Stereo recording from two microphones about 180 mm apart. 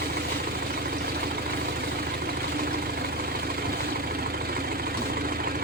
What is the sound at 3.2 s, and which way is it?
Vehicle, 55° right (ahead or behind).